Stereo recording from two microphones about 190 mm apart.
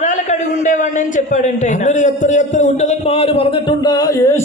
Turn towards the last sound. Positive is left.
turn(degrees=15)  # may be behind; listen again after turning